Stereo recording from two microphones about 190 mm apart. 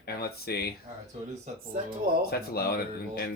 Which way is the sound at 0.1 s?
55° left (ahead or behind).